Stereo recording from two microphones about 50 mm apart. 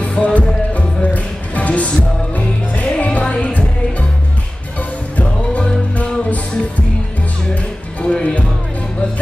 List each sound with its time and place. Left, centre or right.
0.0 s music: left
5.1 s music: left
8.0 s music: left